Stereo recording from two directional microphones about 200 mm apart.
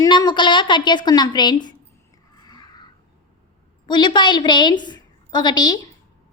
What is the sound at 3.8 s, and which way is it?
A woman's voice, 20° left (ahead or behind).